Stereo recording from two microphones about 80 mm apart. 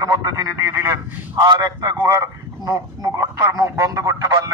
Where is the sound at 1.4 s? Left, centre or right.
Right.